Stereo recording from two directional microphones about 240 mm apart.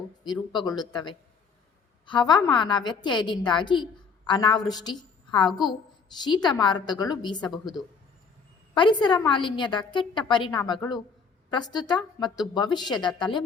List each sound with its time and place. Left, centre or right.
0.3 s a woman's voice: centre
8.7 s a woman's voice: centre